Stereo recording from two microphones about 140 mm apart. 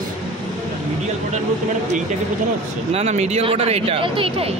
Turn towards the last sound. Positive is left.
turn(degrees=-40)  # may be behind; listen again after turning